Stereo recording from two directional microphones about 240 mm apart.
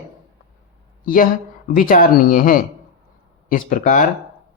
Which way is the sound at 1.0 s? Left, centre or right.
Left.